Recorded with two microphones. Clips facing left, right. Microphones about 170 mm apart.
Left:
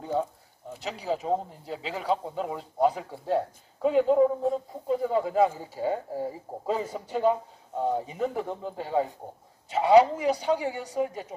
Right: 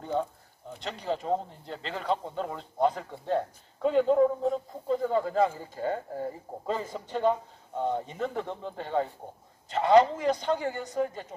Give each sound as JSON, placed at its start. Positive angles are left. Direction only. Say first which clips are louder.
{"t": 0.0, "sound": "speech", "louder": "left 1 dB", "side_deg": 5}